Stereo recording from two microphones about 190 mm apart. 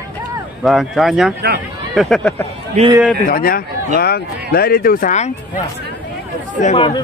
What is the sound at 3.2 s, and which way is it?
Speech, 50° left (ahead or behind).